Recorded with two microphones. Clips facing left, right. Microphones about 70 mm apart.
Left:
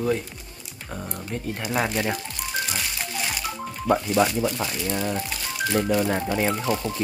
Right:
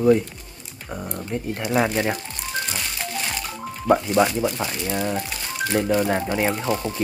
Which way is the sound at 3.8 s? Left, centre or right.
Right.